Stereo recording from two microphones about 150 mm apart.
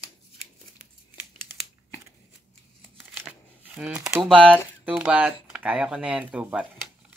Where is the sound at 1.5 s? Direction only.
15° right (ahead or behind).